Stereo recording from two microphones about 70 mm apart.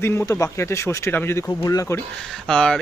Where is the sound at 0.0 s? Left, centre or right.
Left.